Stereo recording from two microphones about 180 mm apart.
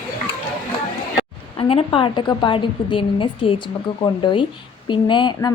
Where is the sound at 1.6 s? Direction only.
30° left (ahead or behind).